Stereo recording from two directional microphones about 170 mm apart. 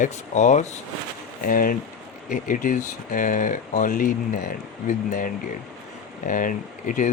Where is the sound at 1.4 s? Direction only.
55° left (ahead or behind).